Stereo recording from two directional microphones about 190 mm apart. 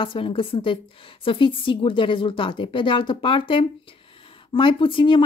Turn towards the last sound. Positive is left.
turn(degrees=25)  # may be behind; listen again after turning